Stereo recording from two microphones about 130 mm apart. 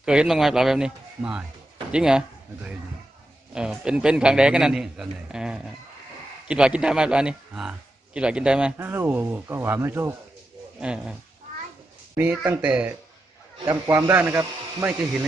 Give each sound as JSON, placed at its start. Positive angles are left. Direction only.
{"t": 0.0, "sound": "speech", "side_deg": -5}
{"t": 3.5, "sound": "a man's voice", "side_deg": -5}
{"t": 10.8, "sound": "a man's voice", "side_deg": -10}